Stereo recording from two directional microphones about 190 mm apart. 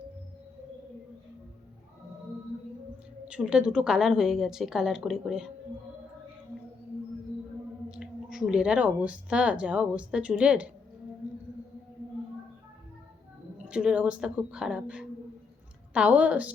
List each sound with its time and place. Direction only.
3.2 s a woman's voice: 5° right (ahead or behind)
7.9 s speech: 5° right (ahead or behind)
13.7 s a woman's voice: 5° right (ahead or behind)